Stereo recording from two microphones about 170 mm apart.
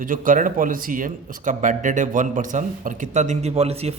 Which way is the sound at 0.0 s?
55° right (ahead or behind).